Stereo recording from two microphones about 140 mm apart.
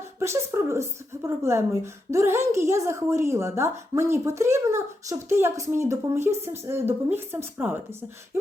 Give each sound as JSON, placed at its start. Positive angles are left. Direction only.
{"t": 0.2, "sound": "speech", "side_deg": -20}